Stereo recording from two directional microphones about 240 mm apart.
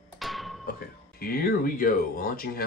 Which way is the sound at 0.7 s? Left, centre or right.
Left.